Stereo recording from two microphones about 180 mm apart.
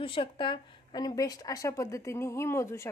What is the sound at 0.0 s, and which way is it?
A woman's voice, 30° left (ahead or behind).